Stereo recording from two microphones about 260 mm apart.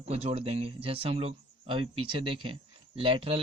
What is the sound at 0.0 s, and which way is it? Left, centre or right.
A man's voice, right.